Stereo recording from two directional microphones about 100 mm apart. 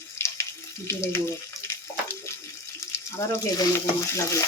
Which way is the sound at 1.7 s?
30° left (ahead or behind).